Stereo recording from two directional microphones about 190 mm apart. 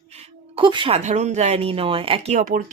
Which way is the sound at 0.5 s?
25° right (ahead or behind).